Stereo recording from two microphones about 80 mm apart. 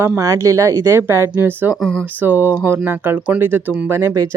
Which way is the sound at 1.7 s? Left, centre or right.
Centre.